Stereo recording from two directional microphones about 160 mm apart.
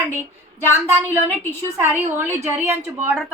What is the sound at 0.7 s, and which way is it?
A woman's voice, 15° right (ahead or behind).